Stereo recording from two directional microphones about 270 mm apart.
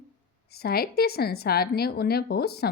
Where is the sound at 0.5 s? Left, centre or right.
Left.